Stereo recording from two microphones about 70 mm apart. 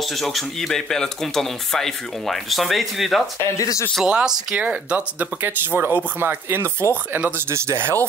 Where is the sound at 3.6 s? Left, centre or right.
Left.